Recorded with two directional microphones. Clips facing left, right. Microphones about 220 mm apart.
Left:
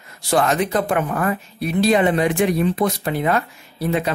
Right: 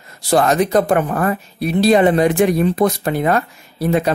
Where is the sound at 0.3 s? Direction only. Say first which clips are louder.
Right 4 dB; 40° right (ahead or behind).